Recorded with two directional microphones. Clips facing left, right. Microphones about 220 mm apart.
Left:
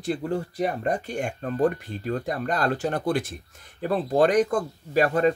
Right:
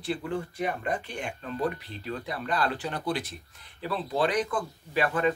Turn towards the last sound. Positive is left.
turn(degrees=40)  # may be behind; listen again after turning